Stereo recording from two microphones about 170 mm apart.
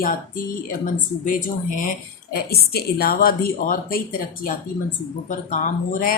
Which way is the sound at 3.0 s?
60° left (ahead or behind).